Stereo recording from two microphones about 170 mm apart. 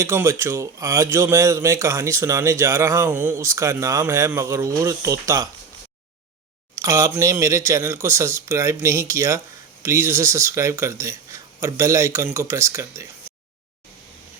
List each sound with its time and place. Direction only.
0.0 s a man's voice: 15° right (ahead or behind)
6.7 s a man's voice: 15° right (ahead or behind)